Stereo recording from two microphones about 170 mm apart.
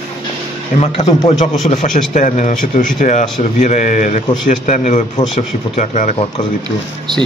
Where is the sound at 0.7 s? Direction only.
40° left (ahead or behind).